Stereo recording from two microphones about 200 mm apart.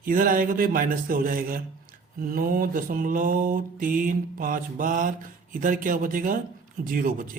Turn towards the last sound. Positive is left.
turn(degrees=-45)  # may be behind; listen again after turning